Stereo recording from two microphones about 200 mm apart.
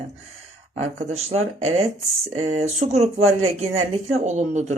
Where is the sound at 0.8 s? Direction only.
35° right (ahead or behind).